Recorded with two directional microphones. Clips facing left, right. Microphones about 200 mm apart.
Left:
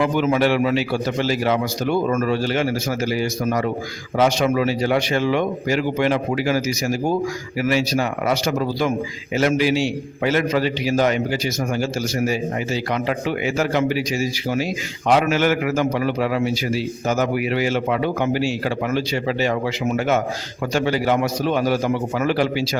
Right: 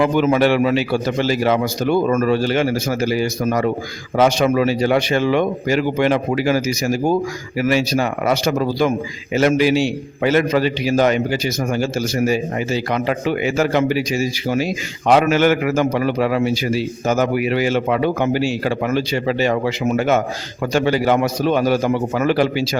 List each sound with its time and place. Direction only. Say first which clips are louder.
0.0 s speech: right 3 dB; 60° right (ahead or behind)